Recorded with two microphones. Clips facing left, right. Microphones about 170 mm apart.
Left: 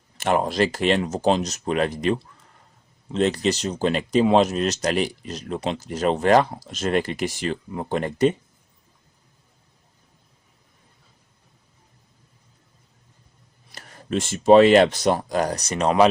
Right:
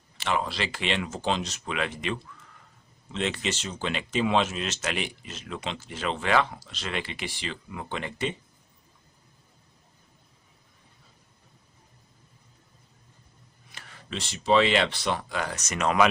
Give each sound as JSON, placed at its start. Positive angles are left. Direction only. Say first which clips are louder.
{"t": 0.2, "sound": "speech", "louder": "left 8 dB", "side_deg": 50}
{"t": 13.7, "sound": "speech", "louder": "left 10 dB", "side_deg": 40}